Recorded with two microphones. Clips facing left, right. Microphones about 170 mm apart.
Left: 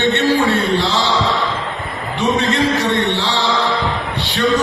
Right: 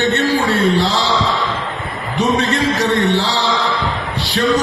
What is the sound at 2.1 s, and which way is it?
A man's voice, 40° right (ahead or behind).